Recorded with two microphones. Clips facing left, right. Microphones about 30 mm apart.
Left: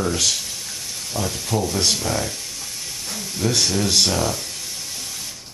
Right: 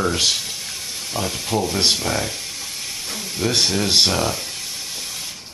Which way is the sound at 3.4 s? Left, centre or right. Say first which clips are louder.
Right 1 dB; right.